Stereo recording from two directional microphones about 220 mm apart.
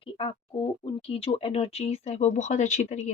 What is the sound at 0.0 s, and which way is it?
Speech, 25° left (ahead or behind).